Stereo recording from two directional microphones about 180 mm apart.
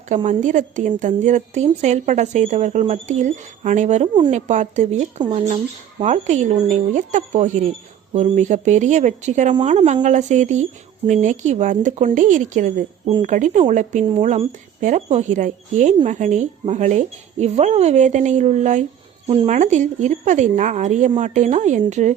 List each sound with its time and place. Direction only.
0.3 s a woman's voice: 45° right (ahead or behind)